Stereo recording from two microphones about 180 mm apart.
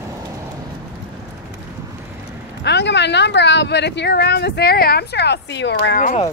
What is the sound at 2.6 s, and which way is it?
Speech, 75° left (ahead or behind).